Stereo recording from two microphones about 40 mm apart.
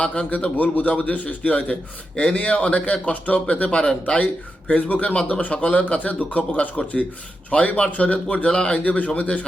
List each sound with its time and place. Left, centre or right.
0.0 s speech: left
0.3 s a man's voice: left
4.7 s a man's voice: left
8.8 s a man's voice: left